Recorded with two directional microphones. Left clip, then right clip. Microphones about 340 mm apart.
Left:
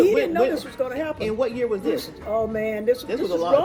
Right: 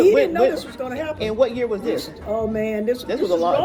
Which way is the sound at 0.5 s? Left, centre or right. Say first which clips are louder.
Left 1 dB; centre.